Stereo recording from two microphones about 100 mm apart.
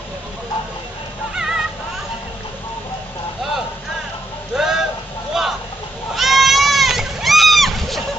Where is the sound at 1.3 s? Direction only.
5° right (ahead or behind).